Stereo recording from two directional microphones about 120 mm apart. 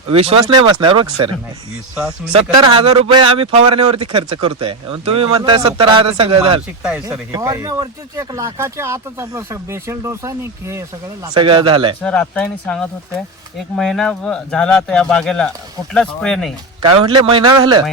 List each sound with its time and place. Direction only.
0.1 s speech: 55° right (ahead or behind)
2.3 s speech: 50° right (ahead or behind)
6.8 s speech: 10° right (ahead or behind)
7.3 s speech: 30° right (ahead or behind)
11.3 s speech: 45° right (ahead or behind)
12.0 s speech: 10° left (ahead or behind)
16.8 s a man's voice: 45° right (ahead or behind)